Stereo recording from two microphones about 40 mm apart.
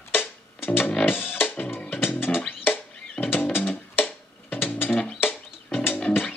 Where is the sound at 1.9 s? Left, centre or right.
Left.